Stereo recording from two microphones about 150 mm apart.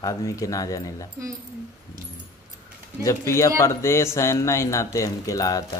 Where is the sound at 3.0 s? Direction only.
20° left (ahead or behind).